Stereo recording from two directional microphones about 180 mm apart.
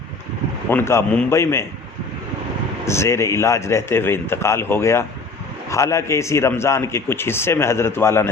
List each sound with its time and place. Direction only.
0.7 s a man's voice: 10° left (ahead or behind)
2.8 s a man's voice: 15° left (ahead or behind)